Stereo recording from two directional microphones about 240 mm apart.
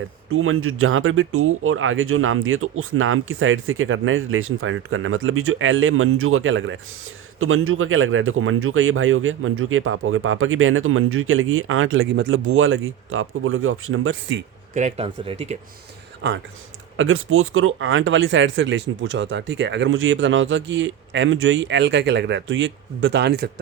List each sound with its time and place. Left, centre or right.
0.3 s speech: right
14.8 s speech: right
16.2 s speech: right